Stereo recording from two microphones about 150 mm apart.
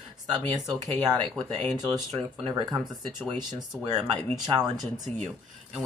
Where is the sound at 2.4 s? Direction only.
30° right (ahead or behind).